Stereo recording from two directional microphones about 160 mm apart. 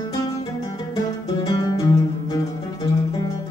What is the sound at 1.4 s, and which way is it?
Music, 25° left (ahead or behind).